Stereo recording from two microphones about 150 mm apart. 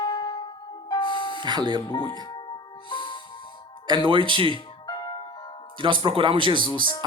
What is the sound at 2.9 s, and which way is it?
Music, 35° left (ahead or behind).